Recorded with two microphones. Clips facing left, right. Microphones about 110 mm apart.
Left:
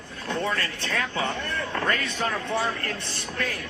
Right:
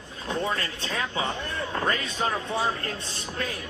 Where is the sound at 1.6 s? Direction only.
25° right (ahead or behind).